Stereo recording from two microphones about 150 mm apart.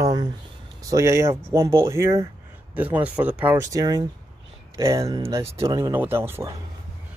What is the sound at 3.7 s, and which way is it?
Speech, 25° right (ahead or behind).